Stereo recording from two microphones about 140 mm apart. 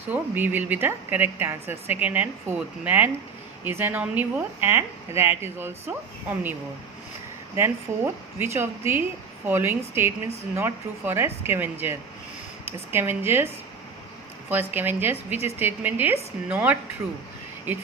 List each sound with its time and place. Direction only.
0.1 s a woman's voice: 15° right (ahead or behind)
7.5 s a woman's voice: 15° right (ahead or behind)
14.5 s a woman's voice: 15° right (ahead or behind)